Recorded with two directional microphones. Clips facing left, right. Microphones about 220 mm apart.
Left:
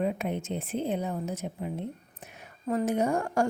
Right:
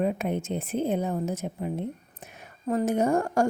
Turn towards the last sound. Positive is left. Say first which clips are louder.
# right 3 dB
turn(degrees=-45)  # may be behind; listen again after turning